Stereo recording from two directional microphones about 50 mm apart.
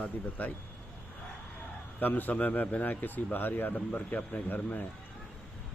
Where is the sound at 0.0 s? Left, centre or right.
Left.